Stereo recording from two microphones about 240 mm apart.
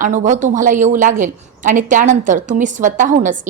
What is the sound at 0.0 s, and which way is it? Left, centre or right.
A woman's voice, right.